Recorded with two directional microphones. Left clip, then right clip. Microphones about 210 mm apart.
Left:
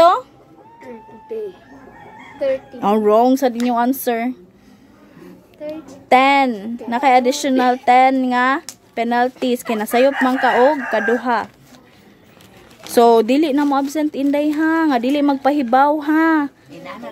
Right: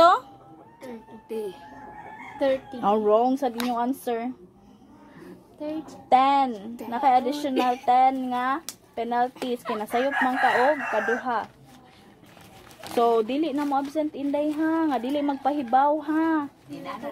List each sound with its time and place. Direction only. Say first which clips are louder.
2.8 s speech: left 7 dB; 35° left (ahead or behind)
6.0 s a woman's voice: left 7 dB; 40° left (ahead or behind)
12.9 s a woman's voice: left 10 dB; 55° left (ahead or behind)